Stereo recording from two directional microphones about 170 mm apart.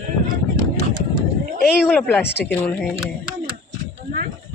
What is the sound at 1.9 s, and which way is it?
Speech, 10° left (ahead or behind).